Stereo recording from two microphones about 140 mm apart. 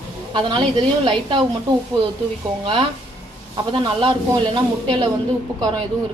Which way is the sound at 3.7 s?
35° right (ahead or behind).